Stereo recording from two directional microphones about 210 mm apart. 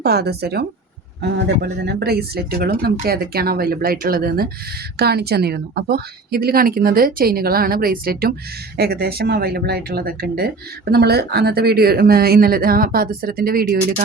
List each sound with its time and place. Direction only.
0.0 s speech: 50° right (ahead or behind)